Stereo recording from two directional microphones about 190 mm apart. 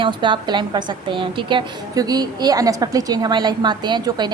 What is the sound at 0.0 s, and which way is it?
A woman's voice, 25° right (ahead or behind).